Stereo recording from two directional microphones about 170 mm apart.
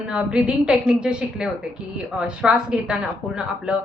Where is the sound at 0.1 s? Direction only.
5° right (ahead or behind).